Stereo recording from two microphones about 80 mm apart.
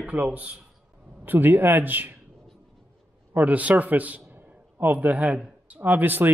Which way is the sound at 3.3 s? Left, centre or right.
Centre.